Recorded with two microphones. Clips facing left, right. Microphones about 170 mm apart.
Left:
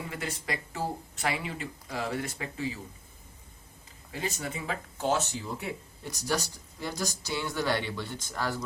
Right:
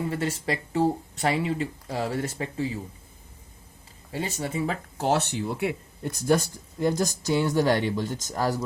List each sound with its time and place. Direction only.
0.1 s speech: 30° right (ahead or behind)
4.1 s speech: 30° right (ahead or behind)
4.9 s speech: 70° right (ahead or behind); by 8.5 s 45° right (ahead or behind)